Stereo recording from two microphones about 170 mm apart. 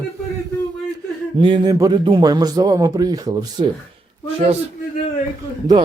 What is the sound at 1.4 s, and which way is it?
Speech, 30° right (ahead or behind).